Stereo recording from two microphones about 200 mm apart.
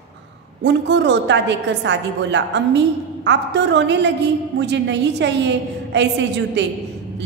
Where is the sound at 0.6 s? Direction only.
60° right (ahead or behind).